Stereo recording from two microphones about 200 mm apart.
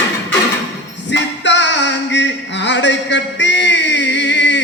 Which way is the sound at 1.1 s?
65° left (ahead or behind).